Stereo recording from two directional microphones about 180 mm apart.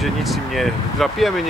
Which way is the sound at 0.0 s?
Centre (ahead or behind).